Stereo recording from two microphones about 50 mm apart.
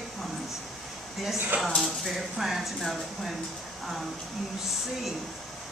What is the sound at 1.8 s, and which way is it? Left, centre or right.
Speech, centre.